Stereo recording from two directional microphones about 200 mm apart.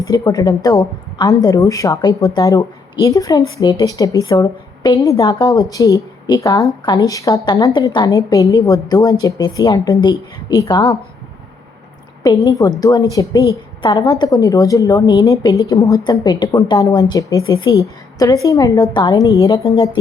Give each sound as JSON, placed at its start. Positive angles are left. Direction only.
{"t": 0.0, "sound": "a woman's voice", "side_deg": 20}
{"t": 12.2, "sound": "a woman's voice", "side_deg": 20}